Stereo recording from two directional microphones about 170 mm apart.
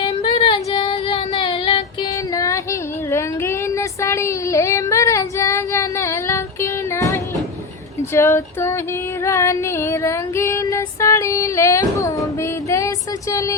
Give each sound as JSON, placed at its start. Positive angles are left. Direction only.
{"t": 0.0, "sound": "female singing", "side_deg": 35}
{"t": 2.3, "sound": "music", "side_deg": 20}
{"t": 3.1, "sound": "child singing", "side_deg": 15}
{"t": 8.1, "sound": "female singing", "side_deg": 15}